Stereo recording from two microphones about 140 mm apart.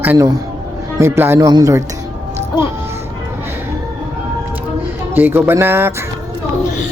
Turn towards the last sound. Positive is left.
turn(degrees=-15)  # may be behind; listen again after turning